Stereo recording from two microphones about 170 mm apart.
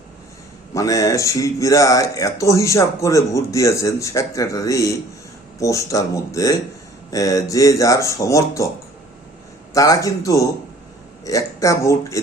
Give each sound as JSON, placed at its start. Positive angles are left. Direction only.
{"t": 0.7, "sound": "speech", "side_deg": 20}
{"t": 9.7, "sound": "speech", "side_deg": 20}